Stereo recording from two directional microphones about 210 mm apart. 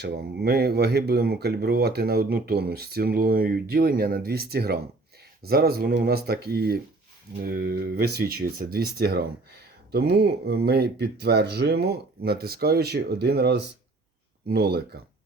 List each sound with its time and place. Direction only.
0.0 s speech: 50° right (ahead or behind)